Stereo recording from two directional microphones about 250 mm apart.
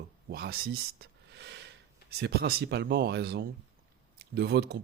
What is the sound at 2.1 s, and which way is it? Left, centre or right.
Speech, right.